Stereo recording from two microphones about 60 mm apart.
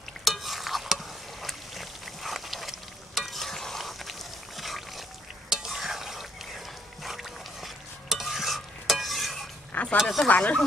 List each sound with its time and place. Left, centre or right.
0.2 s stir: centre
9.7 s a sound: left
9.9 s speech: centre
10.2 s speech: left